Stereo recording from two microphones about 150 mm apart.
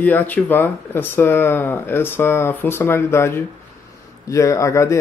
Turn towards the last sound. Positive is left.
turn(degrees=20)  # may be behind; listen again after turning